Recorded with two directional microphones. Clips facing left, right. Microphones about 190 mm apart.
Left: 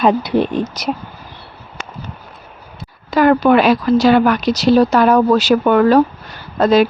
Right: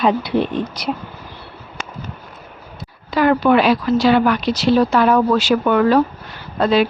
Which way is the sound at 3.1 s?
45° left (ahead or behind).